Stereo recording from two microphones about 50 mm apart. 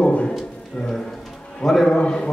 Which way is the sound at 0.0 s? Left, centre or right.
Left.